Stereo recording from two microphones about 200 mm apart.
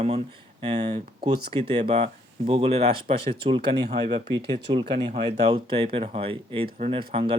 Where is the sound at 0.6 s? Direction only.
30° right (ahead or behind).